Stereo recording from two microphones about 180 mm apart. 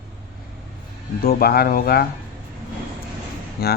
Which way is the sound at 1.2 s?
60° left (ahead or behind).